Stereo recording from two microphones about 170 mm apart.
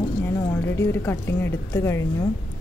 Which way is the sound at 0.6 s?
15° left (ahead or behind).